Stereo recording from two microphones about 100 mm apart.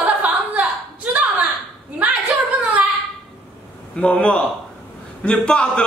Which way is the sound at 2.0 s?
15° right (ahead or behind).